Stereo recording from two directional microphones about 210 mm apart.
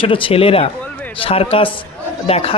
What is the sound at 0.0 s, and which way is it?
Speech, 25° left (ahead or behind).